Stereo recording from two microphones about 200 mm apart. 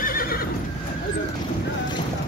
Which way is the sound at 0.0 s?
45° left (ahead or behind).